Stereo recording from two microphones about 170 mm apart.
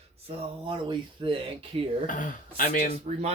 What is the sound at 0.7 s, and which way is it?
Speech, 30° right (ahead or behind).